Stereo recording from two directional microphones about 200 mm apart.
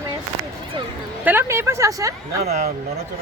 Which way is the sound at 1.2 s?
10° right (ahead or behind).